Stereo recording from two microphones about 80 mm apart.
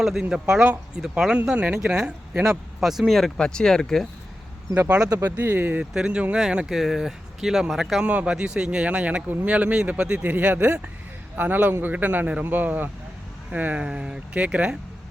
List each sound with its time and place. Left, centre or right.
0.0 s speech: centre
4.7 s a man's voice: centre
5.2 s a man's voice: right
5.8 s speech: centre
8.0 s a man's voice: centre